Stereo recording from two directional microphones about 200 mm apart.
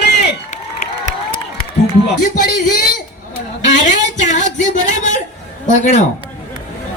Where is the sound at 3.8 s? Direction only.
35° left (ahead or behind).